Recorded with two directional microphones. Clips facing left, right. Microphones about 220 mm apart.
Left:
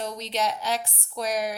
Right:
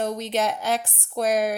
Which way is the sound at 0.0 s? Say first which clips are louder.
Right 4 dB; 50° right (ahead or behind).